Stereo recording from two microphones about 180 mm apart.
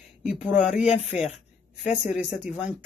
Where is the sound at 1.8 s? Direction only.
35° left (ahead or behind).